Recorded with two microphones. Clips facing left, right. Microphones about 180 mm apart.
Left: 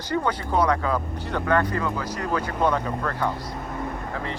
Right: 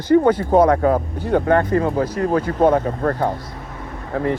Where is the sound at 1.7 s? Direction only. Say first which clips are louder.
Right 9 dB; 35° right (ahead or behind).